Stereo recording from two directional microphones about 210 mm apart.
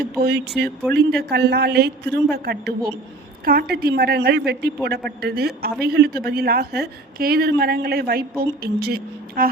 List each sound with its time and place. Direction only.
0.2 s a woman's voice: 50° right (ahead or behind)